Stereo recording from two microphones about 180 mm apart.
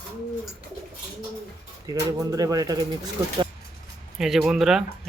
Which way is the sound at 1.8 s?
20° right (ahead or behind).